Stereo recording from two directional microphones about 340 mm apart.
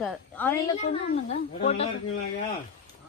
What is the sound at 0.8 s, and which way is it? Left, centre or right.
Speech, left.